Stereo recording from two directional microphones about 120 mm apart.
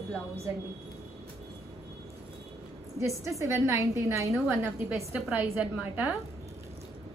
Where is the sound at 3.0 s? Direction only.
25° right (ahead or behind).